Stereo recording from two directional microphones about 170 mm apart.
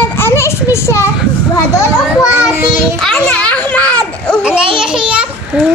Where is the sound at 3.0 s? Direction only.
5° left (ahead or behind).